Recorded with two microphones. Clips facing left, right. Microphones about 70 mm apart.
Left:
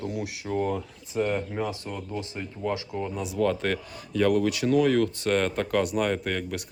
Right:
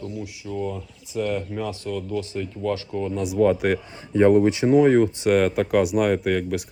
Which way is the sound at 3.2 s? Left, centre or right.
Centre.